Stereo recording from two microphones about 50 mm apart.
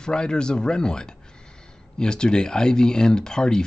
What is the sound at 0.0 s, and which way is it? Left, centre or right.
Speech, centre.